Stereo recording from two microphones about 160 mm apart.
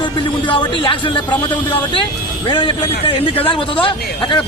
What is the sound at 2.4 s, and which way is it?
A man's voice, 30° left (ahead or behind).